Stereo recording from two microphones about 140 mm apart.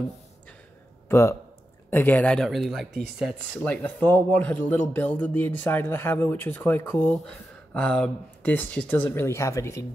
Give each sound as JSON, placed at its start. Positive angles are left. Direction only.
{"t": 1.0, "sound": "speech", "side_deg": 20}